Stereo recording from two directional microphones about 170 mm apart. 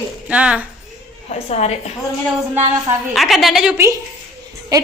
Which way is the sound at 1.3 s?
40° left (ahead or behind).